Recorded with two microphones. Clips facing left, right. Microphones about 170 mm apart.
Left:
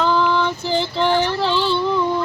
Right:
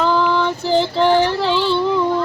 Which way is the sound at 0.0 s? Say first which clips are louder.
Right 1 dB; 10° right (ahead or behind).